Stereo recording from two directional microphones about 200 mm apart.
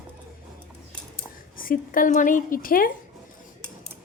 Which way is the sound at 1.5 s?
45° left (ahead or behind).